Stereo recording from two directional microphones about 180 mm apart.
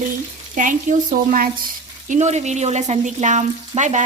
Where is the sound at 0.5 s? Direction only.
45° right (ahead or behind).